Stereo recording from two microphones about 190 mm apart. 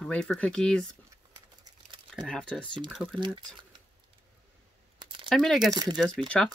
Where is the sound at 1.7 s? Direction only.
20° right (ahead or behind).